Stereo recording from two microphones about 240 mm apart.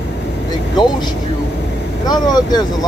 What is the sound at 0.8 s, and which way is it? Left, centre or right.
Vehicle, centre.